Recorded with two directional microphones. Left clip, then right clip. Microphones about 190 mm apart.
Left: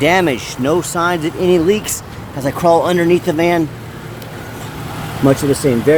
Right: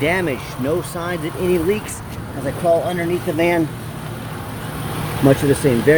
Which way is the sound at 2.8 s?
50° left (ahead or behind).